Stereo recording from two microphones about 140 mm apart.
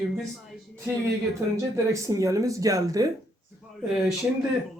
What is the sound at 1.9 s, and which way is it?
Speech, 20° right (ahead or behind).